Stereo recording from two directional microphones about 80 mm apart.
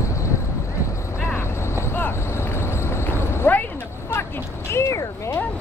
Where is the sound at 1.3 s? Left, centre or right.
Left.